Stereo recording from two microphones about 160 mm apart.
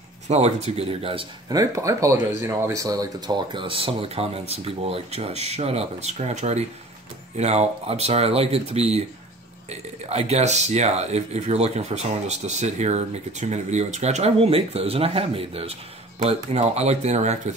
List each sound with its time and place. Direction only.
0.3 s speech: 45° right (ahead or behind)
1.5 s speech: 20° right (ahead or behind); by 17.6 s 45° right (ahead or behind)